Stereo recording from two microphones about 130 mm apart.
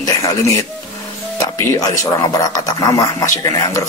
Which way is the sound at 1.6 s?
25° left (ahead or behind).